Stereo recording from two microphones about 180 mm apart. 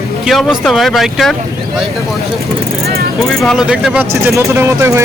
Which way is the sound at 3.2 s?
5° left (ahead or behind).